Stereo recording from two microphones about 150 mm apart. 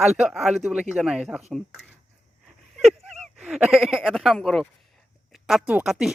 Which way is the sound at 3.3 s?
5° right (ahead or behind).